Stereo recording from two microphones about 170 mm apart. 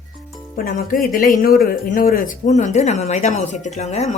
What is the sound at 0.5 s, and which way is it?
Speech, 55° left (ahead or behind).